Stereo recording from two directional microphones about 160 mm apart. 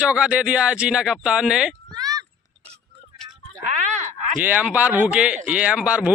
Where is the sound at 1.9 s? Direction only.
25° right (ahead or behind).